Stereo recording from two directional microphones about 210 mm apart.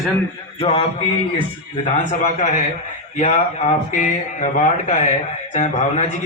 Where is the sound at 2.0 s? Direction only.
35° left (ahead or behind).